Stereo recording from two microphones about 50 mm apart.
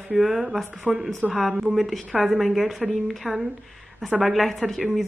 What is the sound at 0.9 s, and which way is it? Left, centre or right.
Speech, centre.